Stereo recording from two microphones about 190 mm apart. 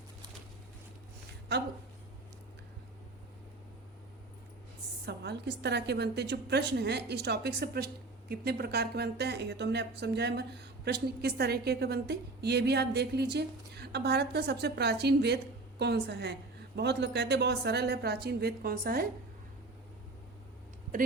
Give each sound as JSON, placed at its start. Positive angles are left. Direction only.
{"t": 5.0, "sound": "speech", "side_deg": -60}